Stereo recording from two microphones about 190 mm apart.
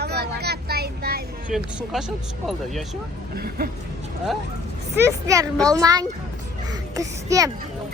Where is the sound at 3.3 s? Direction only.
50° right (ahead or behind).